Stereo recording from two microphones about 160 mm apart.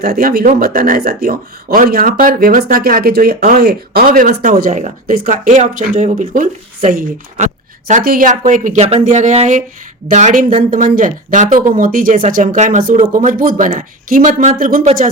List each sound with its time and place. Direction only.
0.0 s speech: 65° right (ahead or behind)